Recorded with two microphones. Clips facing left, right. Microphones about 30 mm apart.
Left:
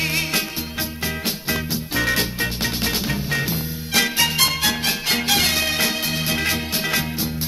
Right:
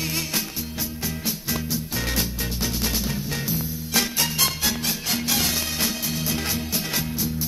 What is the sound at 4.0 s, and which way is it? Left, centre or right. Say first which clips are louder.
Music: left 5 dB; left.